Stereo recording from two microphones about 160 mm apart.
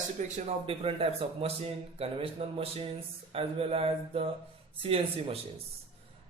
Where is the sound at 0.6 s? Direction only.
35° right (ahead or behind).